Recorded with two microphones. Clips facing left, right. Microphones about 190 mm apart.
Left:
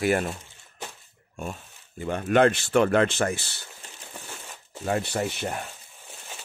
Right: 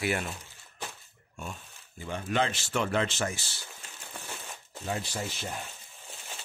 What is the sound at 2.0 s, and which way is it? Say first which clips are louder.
Speech: left 9 dB; 55° left (ahead or behind).